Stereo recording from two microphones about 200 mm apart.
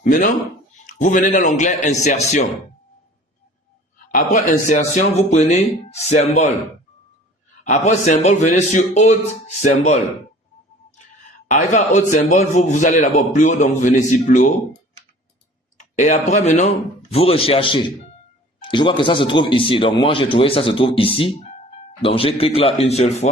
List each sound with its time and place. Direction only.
0.0 s speech: 45° left (ahead or behind)
3.9 s speech: 40° left (ahead or behind)
7.6 s speech: 35° left (ahead or behind)
11.4 s speech: 35° left (ahead or behind)
16.0 s speech: 35° left (ahead or behind)